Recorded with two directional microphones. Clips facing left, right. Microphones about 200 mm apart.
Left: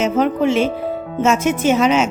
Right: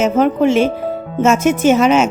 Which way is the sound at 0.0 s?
45° right (ahead or behind).